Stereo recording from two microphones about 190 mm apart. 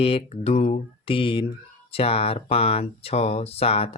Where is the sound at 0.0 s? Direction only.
30° left (ahead or behind).